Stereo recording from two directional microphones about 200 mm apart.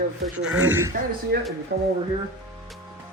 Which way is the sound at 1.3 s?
55° right (ahead or behind).